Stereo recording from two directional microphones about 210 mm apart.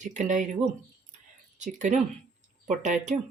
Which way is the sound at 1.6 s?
35° right (ahead or behind).